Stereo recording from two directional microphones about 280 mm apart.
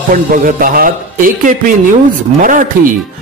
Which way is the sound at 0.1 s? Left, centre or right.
Right.